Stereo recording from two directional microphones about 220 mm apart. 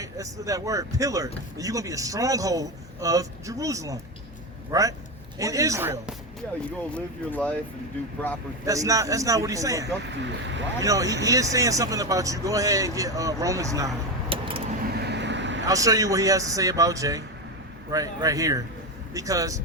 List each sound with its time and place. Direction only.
0.0 s speech: 15° right (ahead or behind)
6.7 s speech: 5° left (ahead or behind)
8.6 s speech: 15° right (ahead or behind)
10.2 s speech: 55° right (ahead or behind)
10.8 s speech: 15° right (ahead or behind)
14.9 s vehicle: 50° right (ahead or behind)
15.6 s speech: 15° right (ahead or behind)